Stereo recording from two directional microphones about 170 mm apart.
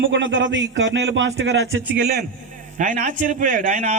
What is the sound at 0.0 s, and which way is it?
A man's voice, 90° right.